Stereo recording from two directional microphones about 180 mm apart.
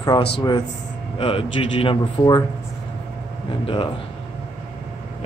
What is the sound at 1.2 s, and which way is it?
A man's voice, 30° left (ahead or behind).